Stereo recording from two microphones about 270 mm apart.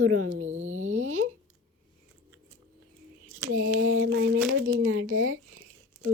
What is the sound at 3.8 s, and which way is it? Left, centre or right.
Speech, right.